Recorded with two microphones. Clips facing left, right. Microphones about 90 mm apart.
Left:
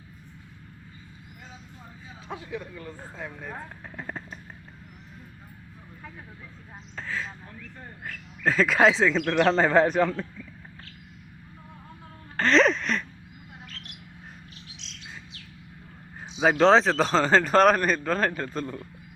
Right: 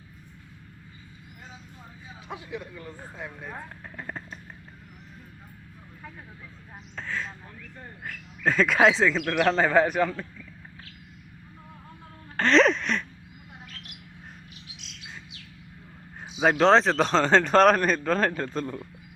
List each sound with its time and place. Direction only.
2.3 s speech: 15° right (ahead or behind)
3.9 s a sound: centre (ahead or behind)
6.9 s a man's voice: centre (ahead or behind)
12.4 s music: centre (ahead or behind)
16.3 s a man's voice: centre (ahead or behind)